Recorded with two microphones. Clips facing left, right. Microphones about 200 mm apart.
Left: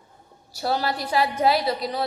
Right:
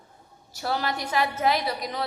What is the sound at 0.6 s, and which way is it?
Speech, 35° left (ahead or behind).